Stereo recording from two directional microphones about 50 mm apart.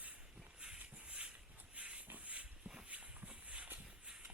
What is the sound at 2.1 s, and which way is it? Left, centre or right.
Pig, right.